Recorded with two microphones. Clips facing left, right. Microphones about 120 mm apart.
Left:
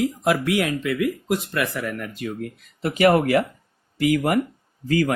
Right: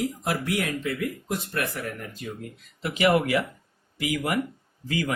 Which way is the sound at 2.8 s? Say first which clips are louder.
Left 5 dB; 50° left (ahead or behind).